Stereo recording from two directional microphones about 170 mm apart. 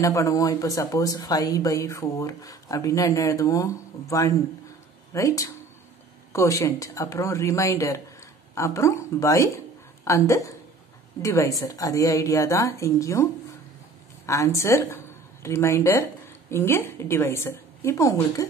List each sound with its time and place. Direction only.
0.0 s speech: 20° left (ahead or behind)